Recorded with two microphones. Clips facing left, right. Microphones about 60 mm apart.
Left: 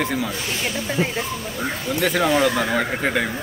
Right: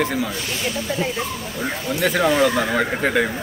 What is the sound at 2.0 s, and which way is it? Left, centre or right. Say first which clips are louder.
Speech: right 1 dB; centre.